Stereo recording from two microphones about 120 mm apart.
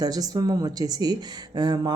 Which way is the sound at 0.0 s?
30° right (ahead or behind).